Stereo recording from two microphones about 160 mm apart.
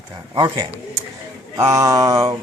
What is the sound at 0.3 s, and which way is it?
Speech, 30° right (ahead or behind).